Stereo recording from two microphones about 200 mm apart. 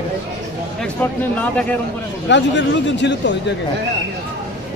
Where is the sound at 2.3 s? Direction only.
60° left (ahead or behind).